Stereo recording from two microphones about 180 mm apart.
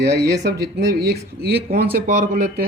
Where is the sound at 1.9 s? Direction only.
50° right (ahead or behind).